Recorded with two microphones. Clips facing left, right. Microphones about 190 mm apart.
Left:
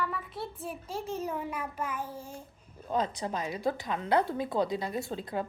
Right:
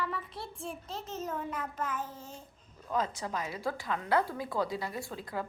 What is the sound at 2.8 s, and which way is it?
Speech, 20° left (ahead or behind).